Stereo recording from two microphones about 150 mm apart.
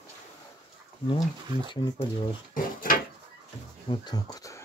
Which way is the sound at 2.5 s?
65° left (ahead or behind).